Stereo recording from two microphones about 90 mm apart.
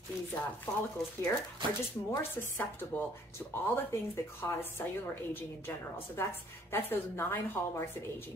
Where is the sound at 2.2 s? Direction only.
25° left (ahead or behind).